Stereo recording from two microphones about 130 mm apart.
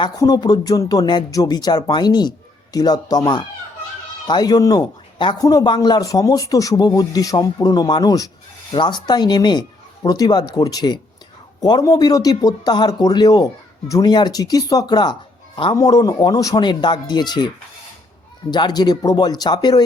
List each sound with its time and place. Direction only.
0.0 s a man's voice: 30° left (ahead or behind)
18.5 s speech: 35° left (ahead or behind)